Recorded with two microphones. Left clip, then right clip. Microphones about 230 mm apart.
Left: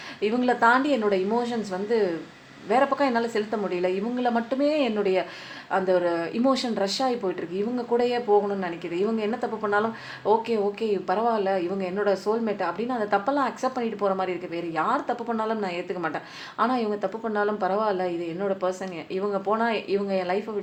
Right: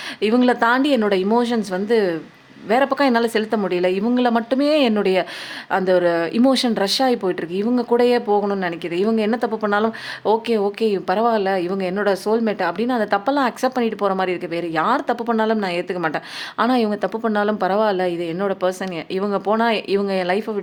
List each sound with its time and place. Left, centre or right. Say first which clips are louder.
0.2 s speech: right 5 dB; right